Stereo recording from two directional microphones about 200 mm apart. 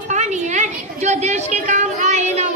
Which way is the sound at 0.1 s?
35° right (ahead or behind).